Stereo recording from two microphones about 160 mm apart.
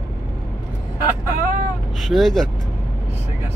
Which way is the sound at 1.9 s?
Centre (ahead or behind).